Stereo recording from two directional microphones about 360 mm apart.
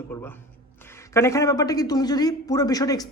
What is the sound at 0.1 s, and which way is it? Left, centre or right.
Speech, centre.